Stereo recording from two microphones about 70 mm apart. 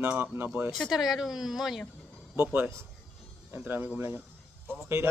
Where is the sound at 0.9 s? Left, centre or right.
Centre.